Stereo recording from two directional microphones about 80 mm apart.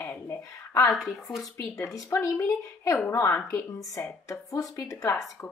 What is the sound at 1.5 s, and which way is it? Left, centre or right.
Speech, left.